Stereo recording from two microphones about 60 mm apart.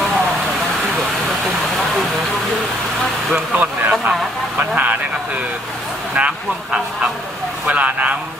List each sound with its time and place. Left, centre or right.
3.3 s speech: right
6.1 s speech: centre